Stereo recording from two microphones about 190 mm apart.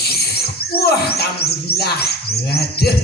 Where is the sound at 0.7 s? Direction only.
55° left (ahead or behind).